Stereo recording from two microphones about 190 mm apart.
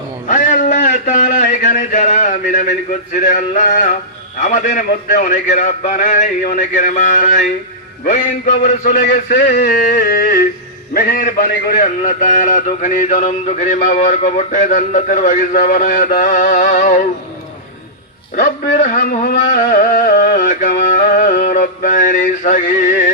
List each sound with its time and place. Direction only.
0.3 s a man's voice: 45° left (ahead or behind)
18.3 s a man's voice: 45° left (ahead or behind)